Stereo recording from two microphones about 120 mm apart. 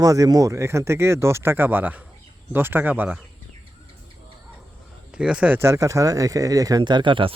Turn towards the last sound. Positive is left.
turn(degrees=-45)  # may be behind; listen again after turning